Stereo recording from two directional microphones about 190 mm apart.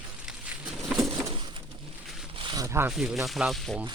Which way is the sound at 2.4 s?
20° right (ahead or behind).